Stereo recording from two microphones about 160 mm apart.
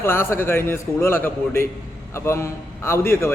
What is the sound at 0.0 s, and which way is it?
A man's voice, 15° left (ahead or behind).